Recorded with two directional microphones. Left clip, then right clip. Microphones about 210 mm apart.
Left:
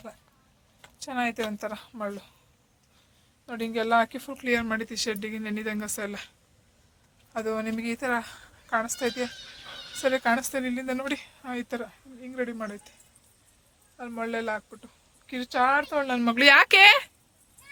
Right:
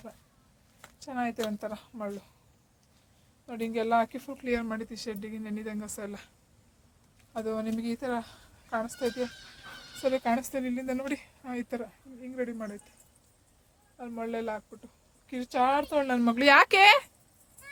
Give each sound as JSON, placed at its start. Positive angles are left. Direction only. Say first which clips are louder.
{"t": 0.9, "sound": "a woman's voice", "louder": "left 4 dB", "side_deg": 5}
{"t": 3.4, "sound": "speech", "louder": "left 2 dB", "side_deg": 0}
{"t": 7.3, "sound": "speech", "louder": "left 3 dB", "side_deg": 0}
{"t": 14.0, "sound": "speech", "louder": "left 3 dB", "side_deg": 5}
{"t": 15.6, "sound": "speech", "louder": "left 2 dB", "side_deg": -20}
{"t": 16.3, "sound": "speech", "louder": "left 4 dB", "side_deg": 0}